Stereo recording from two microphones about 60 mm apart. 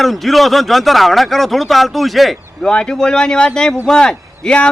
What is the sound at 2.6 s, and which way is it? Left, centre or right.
A man's voice, centre.